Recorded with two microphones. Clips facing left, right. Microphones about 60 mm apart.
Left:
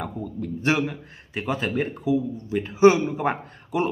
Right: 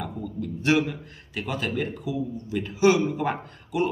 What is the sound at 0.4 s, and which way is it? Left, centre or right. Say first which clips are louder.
A man's voice: right 1 dB; left.